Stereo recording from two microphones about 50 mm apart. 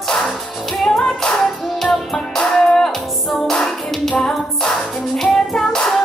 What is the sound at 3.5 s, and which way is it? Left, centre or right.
Clapping, centre.